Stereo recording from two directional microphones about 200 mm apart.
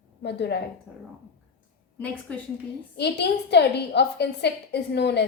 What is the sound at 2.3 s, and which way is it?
Speech, 5° left (ahead or behind).